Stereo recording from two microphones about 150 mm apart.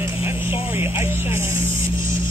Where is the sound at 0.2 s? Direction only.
15° right (ahead or behind).